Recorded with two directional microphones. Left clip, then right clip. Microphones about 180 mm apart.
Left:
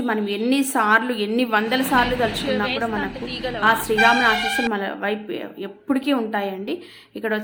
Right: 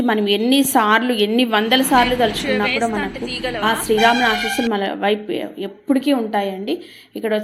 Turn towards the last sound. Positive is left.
turn(degrees=-5)  # may be behind; listen again after turning